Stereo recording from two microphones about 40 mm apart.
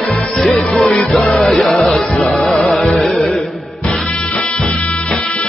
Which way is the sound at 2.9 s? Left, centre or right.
Centre.